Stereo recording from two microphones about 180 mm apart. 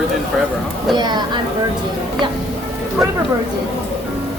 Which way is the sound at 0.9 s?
25° right (ahead or behind).